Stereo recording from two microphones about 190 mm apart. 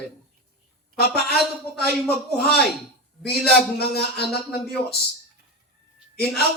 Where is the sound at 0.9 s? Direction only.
55° left (ahead or behind).